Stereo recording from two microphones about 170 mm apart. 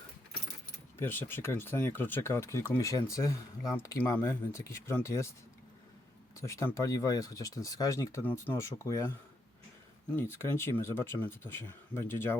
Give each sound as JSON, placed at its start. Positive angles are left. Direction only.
{"t": 0.9, "sound": "speech", "side_deg": 15}
{"t": 6.3, "sound": "speech", "side_deg": 15}
{"t": 10.2, "sound": "speech", "side_deg": 15}